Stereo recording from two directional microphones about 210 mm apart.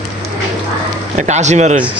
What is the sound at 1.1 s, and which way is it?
Speech, 35° right (ahead or behind).